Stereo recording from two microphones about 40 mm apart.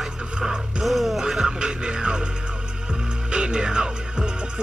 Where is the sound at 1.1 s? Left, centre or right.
Centre.